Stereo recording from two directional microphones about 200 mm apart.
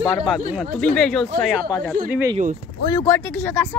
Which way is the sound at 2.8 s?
15° left (ahead or behind).